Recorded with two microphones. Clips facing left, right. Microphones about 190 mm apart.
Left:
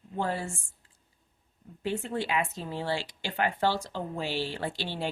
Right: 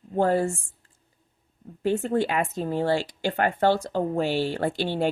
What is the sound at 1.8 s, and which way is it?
Speech, 45° right (ahead or behind).